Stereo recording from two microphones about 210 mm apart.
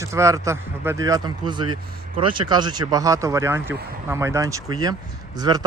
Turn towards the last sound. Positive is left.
turn(degrees=-20)  # may be behind; listen again after turning